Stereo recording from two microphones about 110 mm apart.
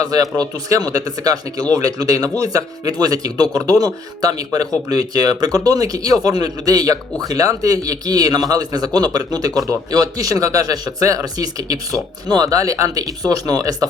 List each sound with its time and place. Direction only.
0.0 s a man's voice: 35° right (ahead or behind)